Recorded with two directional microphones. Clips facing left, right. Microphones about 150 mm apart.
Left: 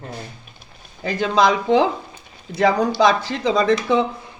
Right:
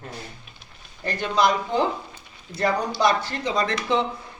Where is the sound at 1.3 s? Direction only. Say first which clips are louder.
Left 5 dB; 90° left.